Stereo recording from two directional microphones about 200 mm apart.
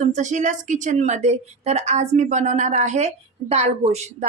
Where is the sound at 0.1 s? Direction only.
35° right (ahead or behind).